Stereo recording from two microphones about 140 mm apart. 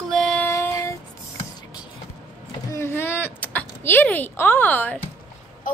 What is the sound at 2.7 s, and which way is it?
Speech, 15° left (ahead or behind).